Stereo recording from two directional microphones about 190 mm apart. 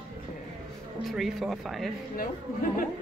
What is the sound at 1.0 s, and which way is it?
Speech, centre (ahead or behind).